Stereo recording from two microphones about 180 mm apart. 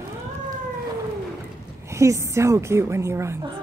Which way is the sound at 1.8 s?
15° right (ahead or behind).